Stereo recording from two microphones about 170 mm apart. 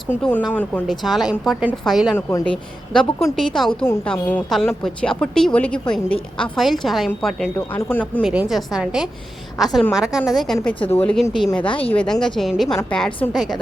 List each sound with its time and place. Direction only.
0.1 s a woman's voice: 10° left (ahead or behind)
2.1 s a woman's voice: 10° left (ahead or behind)
6.1 s a woman's voice: 30° left (ahead or behind)
6.6 s a woman's voice: centre (ahead or behind)
8.2 s a woman's voice: 5° right (ahead or behind)